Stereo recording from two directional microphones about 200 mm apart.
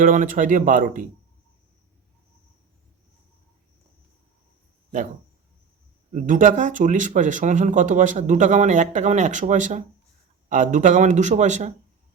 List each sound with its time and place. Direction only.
0.0 s speech: 40° right (ahead or behind)
6.1 s speech: 40° right (ahead or behind)